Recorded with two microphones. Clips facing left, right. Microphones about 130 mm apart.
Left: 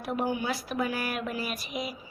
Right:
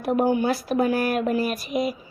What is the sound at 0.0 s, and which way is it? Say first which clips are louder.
A woman's voice: right 9 dB; 50° right (ahead or behind).